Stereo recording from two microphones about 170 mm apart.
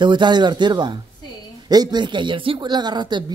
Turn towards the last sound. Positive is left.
turn(degrees=-25)  # may be behind; listen again after turning